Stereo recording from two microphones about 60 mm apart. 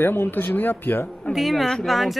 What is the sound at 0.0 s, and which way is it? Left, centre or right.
Speech, left.